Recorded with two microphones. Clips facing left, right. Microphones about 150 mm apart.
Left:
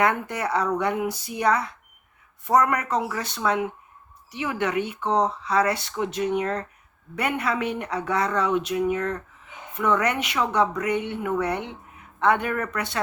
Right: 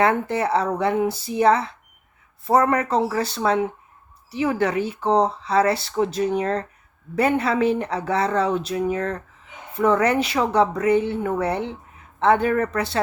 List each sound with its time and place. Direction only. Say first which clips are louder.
0.0 s speech: right 4 dB; 30° right (ahead or behind)